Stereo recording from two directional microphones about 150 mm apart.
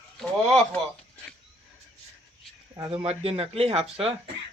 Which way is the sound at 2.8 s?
40° right (ahead or behind).